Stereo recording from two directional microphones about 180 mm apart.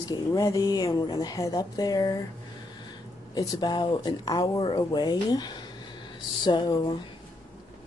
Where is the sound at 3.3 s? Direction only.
25° left (ahead or behind).